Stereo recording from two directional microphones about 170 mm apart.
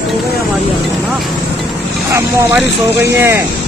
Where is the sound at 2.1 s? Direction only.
15° right (ahead or behind).